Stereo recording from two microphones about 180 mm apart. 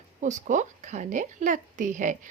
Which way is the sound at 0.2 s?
45° right (ahead or behind).